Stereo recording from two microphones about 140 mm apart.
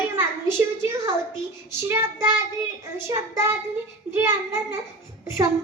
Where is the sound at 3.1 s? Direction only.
20° right (ahead or behind).